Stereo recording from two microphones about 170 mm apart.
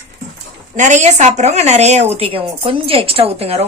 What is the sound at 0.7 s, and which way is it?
A woman's voice, 45° right (ahead or behind).